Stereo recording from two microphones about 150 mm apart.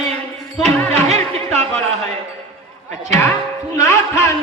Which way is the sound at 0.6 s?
45° right (ahead or behind).